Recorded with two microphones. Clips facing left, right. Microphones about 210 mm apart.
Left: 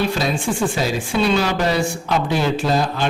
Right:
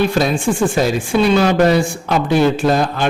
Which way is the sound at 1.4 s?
50° right (ahead or behind).